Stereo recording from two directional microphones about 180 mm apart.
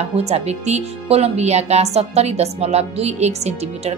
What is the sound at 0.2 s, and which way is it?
Speech, 35° right (ahead or behind).